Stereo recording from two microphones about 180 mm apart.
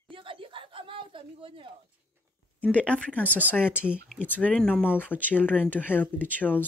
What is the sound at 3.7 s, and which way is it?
Speech, 5° right (ahead or behind).